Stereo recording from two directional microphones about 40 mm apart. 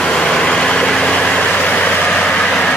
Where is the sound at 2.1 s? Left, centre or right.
Left.